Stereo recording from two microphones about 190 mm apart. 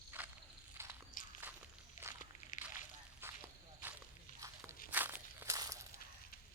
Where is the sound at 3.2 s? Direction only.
10° right (ahead or behind).